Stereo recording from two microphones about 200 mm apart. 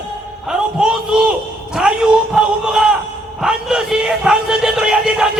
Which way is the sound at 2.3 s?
5° right (ahead or behind).